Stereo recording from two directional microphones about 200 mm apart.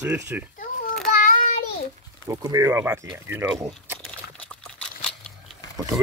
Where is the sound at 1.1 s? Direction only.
45° left (ahead or behind).